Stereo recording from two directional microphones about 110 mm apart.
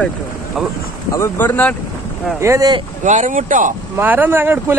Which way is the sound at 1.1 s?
20° left (ahead or behind).